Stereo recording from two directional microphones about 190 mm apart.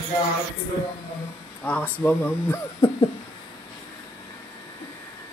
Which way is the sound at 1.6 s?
10° left (ahead or behind).